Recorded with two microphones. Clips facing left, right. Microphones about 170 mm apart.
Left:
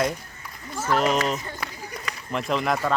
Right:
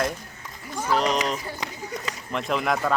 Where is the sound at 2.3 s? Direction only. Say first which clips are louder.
Left 1 dB; centre (ahead or behind).